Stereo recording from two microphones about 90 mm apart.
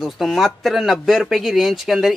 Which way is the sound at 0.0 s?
Centre (ahead or behind).